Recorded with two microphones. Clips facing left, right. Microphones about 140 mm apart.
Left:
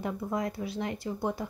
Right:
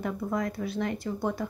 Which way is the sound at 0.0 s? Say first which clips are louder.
Right 2 dB; 15° left (ahead or behind).